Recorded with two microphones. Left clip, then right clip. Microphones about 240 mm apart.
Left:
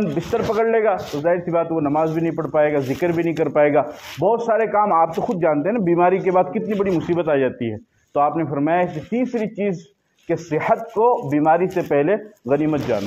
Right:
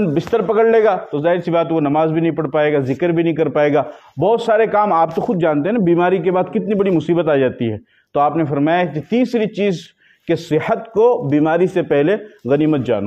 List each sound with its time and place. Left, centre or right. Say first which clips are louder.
0.0 s a man's voice: right 5 dB; right